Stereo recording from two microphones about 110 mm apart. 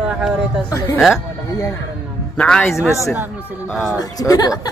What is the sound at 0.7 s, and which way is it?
Speech, 30° left (ahead or behind).